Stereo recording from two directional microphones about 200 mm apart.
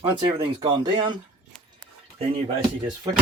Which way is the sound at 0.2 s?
25° right (ahead or behind).